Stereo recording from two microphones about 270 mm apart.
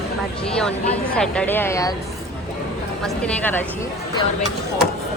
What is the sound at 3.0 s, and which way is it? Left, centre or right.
Speech, centre.